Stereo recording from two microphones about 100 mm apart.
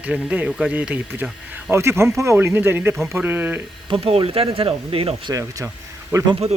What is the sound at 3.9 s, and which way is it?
Speech, 65° right (ahead or behind).